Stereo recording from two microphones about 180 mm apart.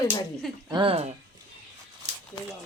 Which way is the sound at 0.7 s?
30° right (ahead or behind).